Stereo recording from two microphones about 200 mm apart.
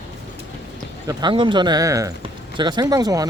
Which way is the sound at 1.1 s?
25° right (ahead or behind).